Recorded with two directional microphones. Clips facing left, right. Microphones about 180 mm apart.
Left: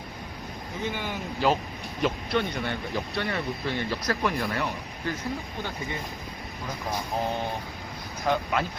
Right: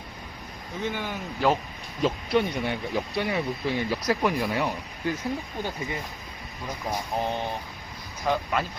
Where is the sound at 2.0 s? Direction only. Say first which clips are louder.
Right 3 dB; 5° right (ahead or behind).